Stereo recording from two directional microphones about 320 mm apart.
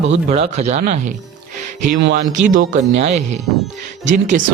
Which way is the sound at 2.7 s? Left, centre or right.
Centre.